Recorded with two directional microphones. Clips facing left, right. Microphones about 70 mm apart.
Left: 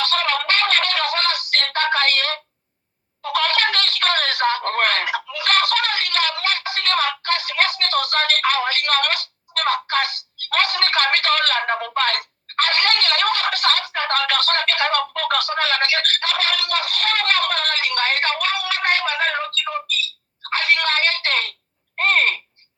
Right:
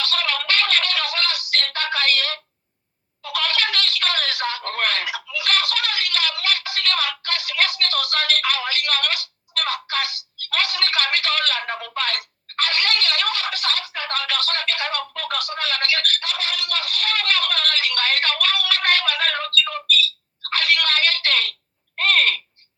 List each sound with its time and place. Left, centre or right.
0.0 s music: left
3.2 s a sound: left
15.4 s speech: left
16.2 s speech: left
16.6 s speech: left
16.9 s a sound: left